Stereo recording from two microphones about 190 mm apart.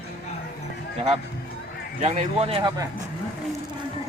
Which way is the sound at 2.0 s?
35° right (ahead or behind).